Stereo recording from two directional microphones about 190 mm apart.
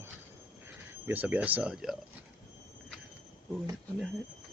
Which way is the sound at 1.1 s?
10° right (ahead or behind).